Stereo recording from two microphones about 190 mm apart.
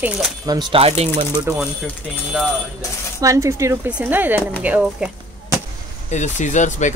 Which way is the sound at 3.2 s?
15° right (ahead or behind).